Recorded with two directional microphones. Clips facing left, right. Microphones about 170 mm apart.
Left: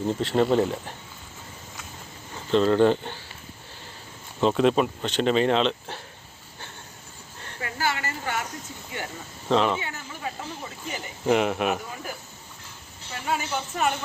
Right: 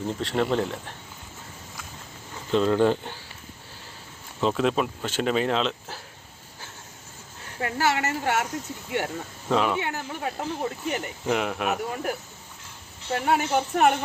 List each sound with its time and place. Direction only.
0.2 s speech: centre (ahead or behind)
2.5 s speech: 5° right (ahead or behind)
4.4 s speech: centre (ahead or behind)
7.6 s a woman's voice: 70° right (ahead or behind)
9.5 s speech: 5° right (ahead or behind)
9.8 s speech: 65° right (ahead or behind)
11.3 s speech: centre (ahead or behind)
13.1 s speech: 60° right (ahead or behind)